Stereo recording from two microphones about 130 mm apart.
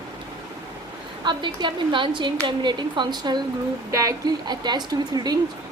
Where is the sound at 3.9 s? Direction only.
25° right (ahead or behind).